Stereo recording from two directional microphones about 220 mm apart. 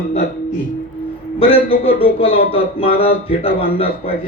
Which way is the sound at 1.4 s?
25° left (ahead or behind).